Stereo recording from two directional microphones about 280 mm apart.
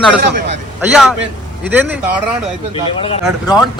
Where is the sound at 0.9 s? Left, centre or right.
Centre.